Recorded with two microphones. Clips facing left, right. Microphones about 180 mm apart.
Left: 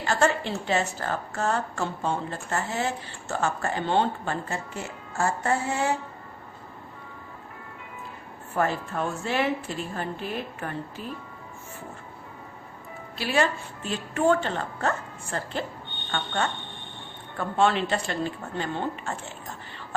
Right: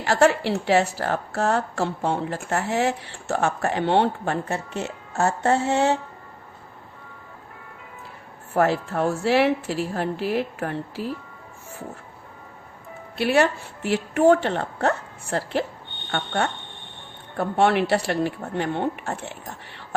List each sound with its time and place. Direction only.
0.0 s a woman's voice: 75° right (ahead or behind)
8.5 s a woman's voice: 75° right (ahead or behind)
13.1 s a woman's voice: 65° right (ahead or behind)